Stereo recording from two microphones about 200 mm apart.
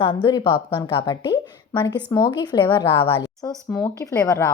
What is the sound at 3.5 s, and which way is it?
Speech, centre (ahead or behind).